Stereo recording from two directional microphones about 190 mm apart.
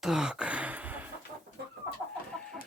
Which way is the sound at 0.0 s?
5° right (ahead or behind).